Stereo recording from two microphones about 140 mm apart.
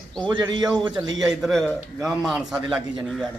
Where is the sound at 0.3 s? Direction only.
35° right (ahead or behind).